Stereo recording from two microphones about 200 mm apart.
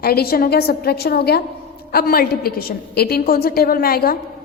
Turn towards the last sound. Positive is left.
turn(degrees=50)  # may be behind; listen again after turning